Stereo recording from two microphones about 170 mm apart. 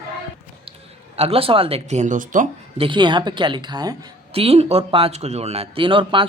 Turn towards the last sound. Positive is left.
turn(degrees=-30)  # may be behind; listen again after turning